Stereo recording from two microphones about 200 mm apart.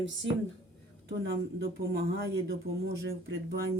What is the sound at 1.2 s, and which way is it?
Speech, 55° right (ahead or behind).